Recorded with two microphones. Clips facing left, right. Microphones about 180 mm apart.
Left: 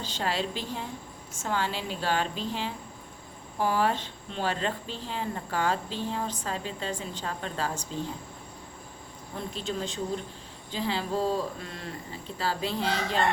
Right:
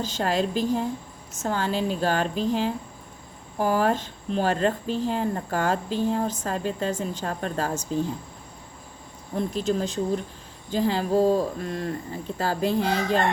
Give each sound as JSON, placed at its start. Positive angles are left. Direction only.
{"t": 0.0, "sound": "speech", "side_deg": -45}
{"t": 9.6, "sound": "speech", "side_deg": -45}